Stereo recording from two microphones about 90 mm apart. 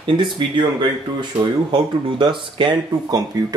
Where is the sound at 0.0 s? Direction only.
65° right (ahead or behind).